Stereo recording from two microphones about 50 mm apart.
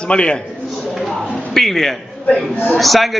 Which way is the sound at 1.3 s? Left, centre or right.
Centre.